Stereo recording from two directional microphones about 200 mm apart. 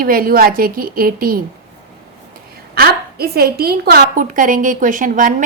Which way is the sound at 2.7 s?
50° right (ahead or behind).